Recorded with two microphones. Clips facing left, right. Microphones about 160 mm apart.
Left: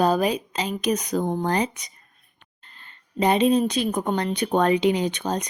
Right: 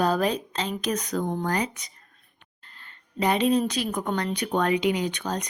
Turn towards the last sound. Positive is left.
turn(degrees=20)  # may be behind; listen again after turning